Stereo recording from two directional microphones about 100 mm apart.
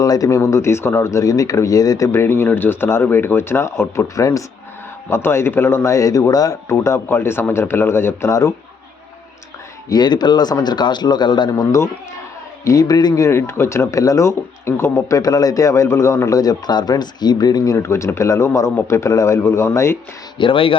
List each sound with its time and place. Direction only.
0.0 s speech: 35° left (ahead or behind)
2.1 s a man's voice: 25° left (ahead or behind)
9.9 s a man's voice: 45° left (ahead or behind)
12.6 s speech: 40° left (ahead or behind)
13.2 s speech: 25° left (ahead or behind); by 17.7 s 40° left (ahead or behind)
17.7 s a man's voice: 25° left (ahead or behind)
20.4 s speech: 60° left (ahead or behind)